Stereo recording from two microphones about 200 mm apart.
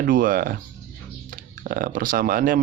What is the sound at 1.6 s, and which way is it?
Speech, 45° right (ahead or behind).